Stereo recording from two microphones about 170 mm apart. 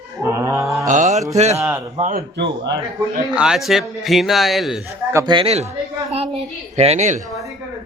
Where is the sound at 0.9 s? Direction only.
45° right (ahead or behind).